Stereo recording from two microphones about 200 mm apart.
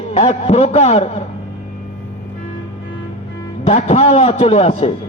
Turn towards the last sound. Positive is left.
turn(degrees=30)  # may be behind; listen again after turning